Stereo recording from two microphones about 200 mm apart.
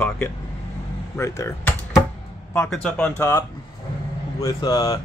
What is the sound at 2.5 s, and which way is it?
Speech, 5° left (ahead or behind).